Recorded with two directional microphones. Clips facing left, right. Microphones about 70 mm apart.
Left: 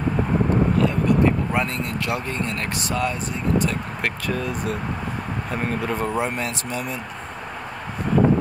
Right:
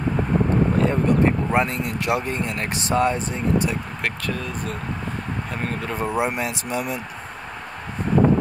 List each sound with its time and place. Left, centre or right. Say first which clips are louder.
0.7 s speech: even; right
1.6 s speech: right 2 dB; centre
2.9 s speech: right 6 dB; right
4.0 s speech: left 3 dB; centre